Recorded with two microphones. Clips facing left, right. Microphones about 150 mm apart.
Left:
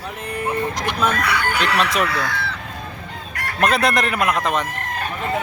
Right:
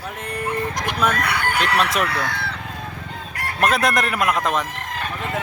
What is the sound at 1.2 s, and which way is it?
Speech, 55° right (ahead or behind).